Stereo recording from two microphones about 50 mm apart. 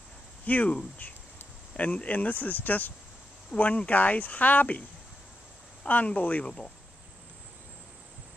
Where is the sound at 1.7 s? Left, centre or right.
Left.